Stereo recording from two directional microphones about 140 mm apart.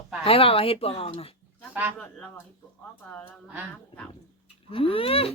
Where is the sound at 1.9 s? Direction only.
10° left (ahead or behind).